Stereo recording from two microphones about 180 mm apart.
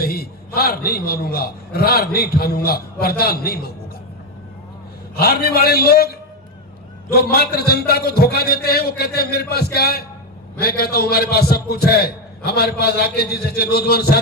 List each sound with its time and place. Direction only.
0.0 s a man's voice: 60° left (ahead or behind)
5.1 s a man's voice: 60° left (ahead or behind)